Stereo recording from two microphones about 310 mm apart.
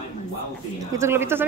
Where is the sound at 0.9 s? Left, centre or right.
Centre.